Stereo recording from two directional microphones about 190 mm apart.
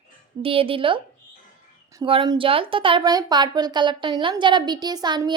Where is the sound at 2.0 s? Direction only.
25° right (ahead or behind).